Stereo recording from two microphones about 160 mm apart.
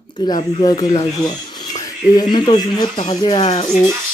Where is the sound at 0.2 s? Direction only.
25° left (ahead or behind).